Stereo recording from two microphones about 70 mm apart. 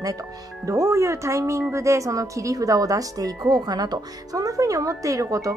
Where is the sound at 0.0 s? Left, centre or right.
Right.